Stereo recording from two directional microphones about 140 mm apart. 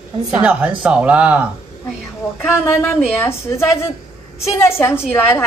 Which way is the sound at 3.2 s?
20° left (ahead or behind).